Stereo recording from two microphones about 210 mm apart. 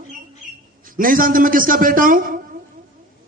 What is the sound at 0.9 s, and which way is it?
A man's voice, 40° right (ahead or behind).